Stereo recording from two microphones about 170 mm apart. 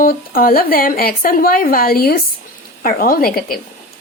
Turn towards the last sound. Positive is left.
turn(degrees=60)  # may be behind; listen again after turning